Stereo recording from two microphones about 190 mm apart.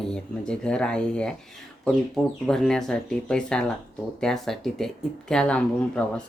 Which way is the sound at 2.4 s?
5° left (ahead or behind).